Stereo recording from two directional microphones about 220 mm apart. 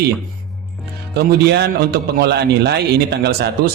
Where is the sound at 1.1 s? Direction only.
45° right (ahead or behind).